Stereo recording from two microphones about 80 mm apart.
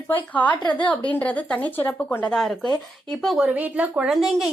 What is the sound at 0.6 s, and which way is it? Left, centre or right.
Speech, left.